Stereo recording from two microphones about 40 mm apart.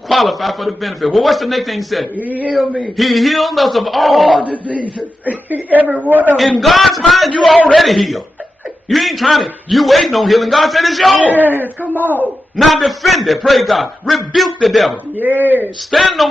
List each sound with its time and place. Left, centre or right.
0.1 s a man's voice: centre
2.1 s a woman's voice: right
2.8 s a man's voice: centre
4.5 s a man's voice: right
6.6 s a man's voice: centre
11.2 s a woman's voice: right
12.5 s a man's voice: centre
15.1 s a woman's voice: right
15.9 s a man's voice: centre